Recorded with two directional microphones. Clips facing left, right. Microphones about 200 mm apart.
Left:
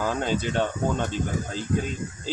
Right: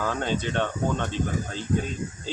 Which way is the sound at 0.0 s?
5° left (ahead or behind).